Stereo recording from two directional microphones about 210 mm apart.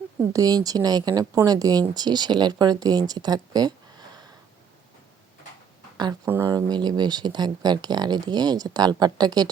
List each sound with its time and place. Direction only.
0.2 s speech: 15° right (ahead or behind)
6.0 s speech: 15° right (ahead or behind)